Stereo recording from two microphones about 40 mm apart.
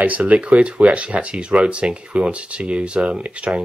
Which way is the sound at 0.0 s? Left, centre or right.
Right.